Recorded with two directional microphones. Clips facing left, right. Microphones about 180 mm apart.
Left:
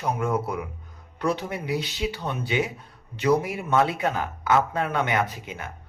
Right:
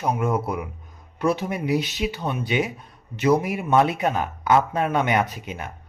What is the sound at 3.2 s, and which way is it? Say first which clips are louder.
A man's voice: right 2 dB; 15° right (ahead or behind).